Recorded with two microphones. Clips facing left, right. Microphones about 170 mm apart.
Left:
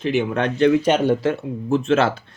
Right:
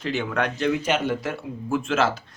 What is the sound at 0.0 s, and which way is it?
Speech, 20° left (ahead or behind).